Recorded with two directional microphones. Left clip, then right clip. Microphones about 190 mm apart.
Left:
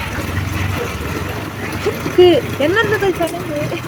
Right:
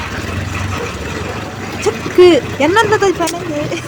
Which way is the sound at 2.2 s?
40° right (ahead or behind).